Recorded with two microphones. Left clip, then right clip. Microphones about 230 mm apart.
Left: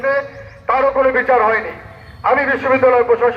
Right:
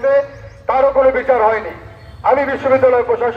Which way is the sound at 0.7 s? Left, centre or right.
Right.